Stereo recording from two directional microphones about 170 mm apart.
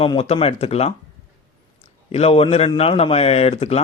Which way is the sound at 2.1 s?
35° left (ahead or behind).